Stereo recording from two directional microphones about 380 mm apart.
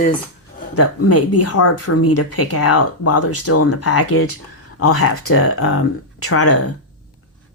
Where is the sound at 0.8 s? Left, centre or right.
Left.